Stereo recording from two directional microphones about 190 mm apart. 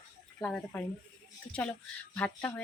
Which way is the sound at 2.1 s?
10° left (ahead or behind).